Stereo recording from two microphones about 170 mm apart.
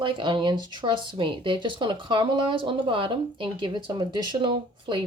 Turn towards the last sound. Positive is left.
turn(degrees=-30)  # may be behind; listen again after turning